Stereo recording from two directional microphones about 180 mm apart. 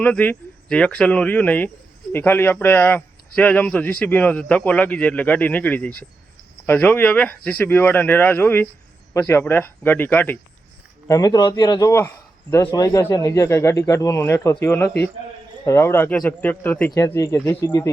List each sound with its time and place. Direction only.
0.0 s a man's voice: 10° left (ahead or behind)
11.1 s a man's voice: 20° left (ahead or behind)